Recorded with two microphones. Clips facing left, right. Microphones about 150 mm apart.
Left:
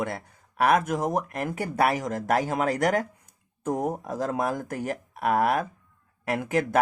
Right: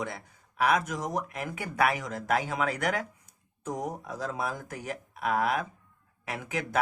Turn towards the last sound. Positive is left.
turn(degrees=50)  # may be behind; listen again after turning